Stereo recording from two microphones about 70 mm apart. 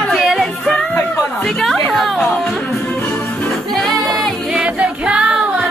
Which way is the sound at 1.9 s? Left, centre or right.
Centre.